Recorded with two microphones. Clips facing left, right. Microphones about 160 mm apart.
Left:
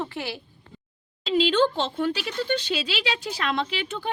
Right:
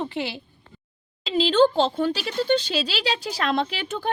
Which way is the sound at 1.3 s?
30° right (ahead or behind).